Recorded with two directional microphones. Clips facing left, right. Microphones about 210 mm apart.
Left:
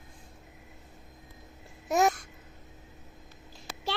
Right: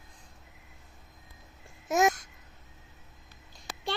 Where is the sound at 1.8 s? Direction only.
Centre (ahead or behind).